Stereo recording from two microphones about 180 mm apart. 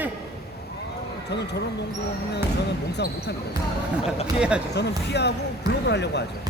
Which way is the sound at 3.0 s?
70° left (ahead or behind).